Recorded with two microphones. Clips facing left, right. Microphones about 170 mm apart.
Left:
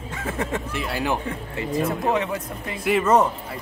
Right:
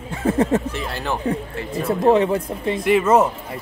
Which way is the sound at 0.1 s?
35° right (ahead or behind).